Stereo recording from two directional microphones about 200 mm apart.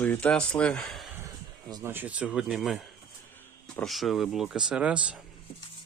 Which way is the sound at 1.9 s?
10° right (ahead or behind).